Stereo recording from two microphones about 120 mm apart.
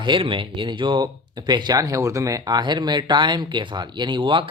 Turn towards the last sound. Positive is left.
turn(degrees=-45)  # may be behind; listen again after turning